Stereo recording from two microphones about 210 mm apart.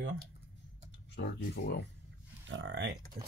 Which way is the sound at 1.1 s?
55° left (ahead or behind).